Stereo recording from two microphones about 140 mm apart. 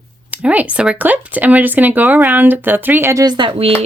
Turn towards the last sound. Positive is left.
turn(degrees=-40)  # may be behind; listen again after turning